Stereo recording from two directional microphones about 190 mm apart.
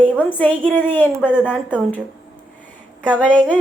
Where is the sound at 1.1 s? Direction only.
5° right (ahead or behind).